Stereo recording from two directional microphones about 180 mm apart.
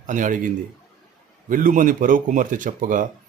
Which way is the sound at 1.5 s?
50° right (ahead or behind).